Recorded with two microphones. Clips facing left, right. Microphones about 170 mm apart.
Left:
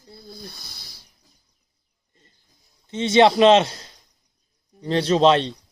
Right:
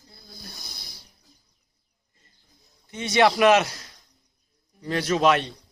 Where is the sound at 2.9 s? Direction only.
25° left (ahead or behind).